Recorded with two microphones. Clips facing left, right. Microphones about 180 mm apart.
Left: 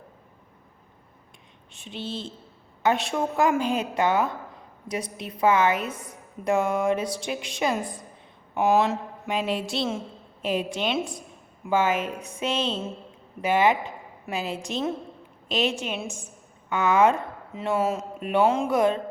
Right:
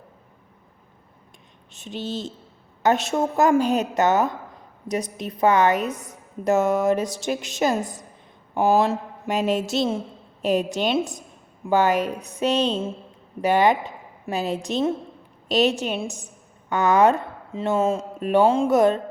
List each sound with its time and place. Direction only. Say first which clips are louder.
1.7 s speech: right 4 dB; 40° right (ahead or behind)
5.9 s a woman's voice: right 4 dB; 10° left (ahead or behind)
6.4 s a woman's voice: right 4 dB; 40° right (ahead or behind)